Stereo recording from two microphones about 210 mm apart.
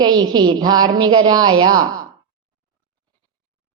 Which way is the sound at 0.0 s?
20° right (ahead or behind).